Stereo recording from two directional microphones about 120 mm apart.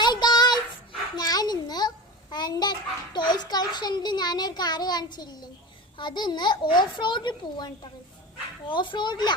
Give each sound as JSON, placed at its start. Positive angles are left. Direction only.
{"t": 0.0, "sound": "child singing", "side_deg": 35}
{"t": 1.1, "sound": "a sound", "side_deg": 35}
{"t": 2.3, "sound": "a child's voice", "side_deg": 35}